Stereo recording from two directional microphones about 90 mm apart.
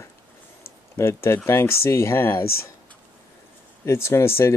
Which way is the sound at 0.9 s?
30° left (ahead or behind).